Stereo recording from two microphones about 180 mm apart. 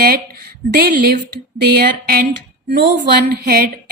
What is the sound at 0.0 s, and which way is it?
Speech, 60° right (ahead or behind).